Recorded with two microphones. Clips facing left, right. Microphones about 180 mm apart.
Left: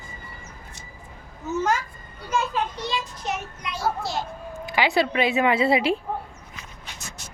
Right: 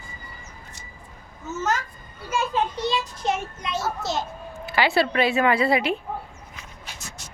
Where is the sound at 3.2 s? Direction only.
25° right (ahead or behind).